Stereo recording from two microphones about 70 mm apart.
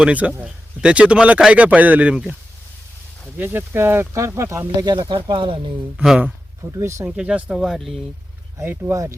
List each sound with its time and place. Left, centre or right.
0.0 s speech: centre
3.3 s speech: right
4.8 s speech: right
6.0 s speech: centre
6.7 s speech: right
7.2 s speech: centre
7.6 s speech: centre
8.9 s speech: right